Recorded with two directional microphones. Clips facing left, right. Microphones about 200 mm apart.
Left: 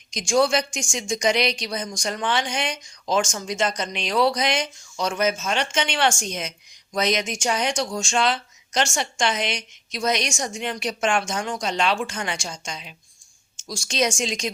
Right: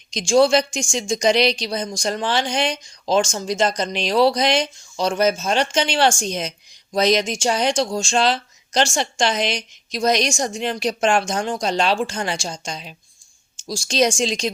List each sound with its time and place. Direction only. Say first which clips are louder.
0.1 s speech: right 5 dB; 30° right (ahead or behind)